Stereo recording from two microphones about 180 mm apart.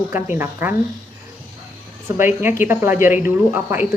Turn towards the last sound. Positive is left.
turn(degrees=-10)  # may be behind; listen again after turning